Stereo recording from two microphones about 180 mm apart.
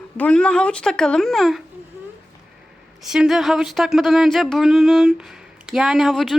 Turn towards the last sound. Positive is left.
turn(degrees=0)  # may be behind; listen again after turning